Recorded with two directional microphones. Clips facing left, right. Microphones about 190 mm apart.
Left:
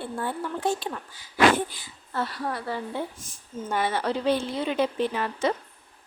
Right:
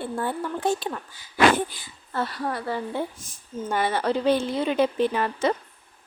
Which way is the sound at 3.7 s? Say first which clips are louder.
Right 2 dB; 50° right (ahead or behind).